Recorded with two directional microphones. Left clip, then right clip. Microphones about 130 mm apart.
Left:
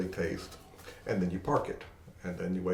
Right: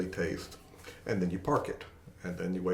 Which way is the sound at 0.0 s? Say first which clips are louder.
Even; 15° right (ahead or behind).